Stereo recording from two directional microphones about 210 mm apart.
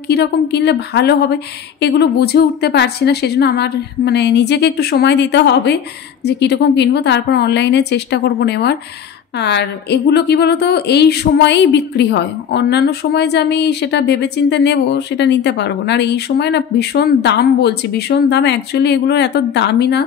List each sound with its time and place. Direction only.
0.1 s a woman's voice: 55° left (ahead or behind)